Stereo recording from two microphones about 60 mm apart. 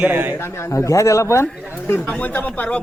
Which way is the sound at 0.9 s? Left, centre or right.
Left.